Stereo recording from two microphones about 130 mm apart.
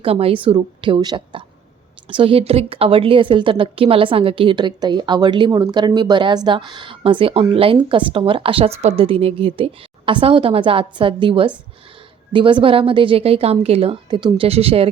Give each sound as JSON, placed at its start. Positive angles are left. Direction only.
{"t": 0.0, "sound": "a woman's voice", "side_deg": -45}
{"t": 14.4, "sound": "a woman's voice", "side_deg": -50}